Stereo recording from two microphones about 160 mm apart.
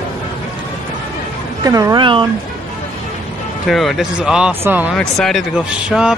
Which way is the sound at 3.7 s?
Centre (ahead or behind).